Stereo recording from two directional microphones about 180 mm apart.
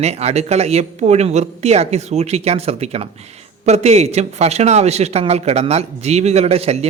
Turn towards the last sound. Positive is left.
turn(degrees=-35)  # may be behind; listen again after turning